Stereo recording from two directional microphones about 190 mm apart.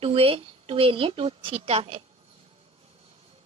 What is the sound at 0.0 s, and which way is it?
A woman's voice, 30° right (ahead or behind).